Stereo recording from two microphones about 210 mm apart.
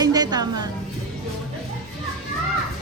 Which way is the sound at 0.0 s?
20° right (ahead or behind).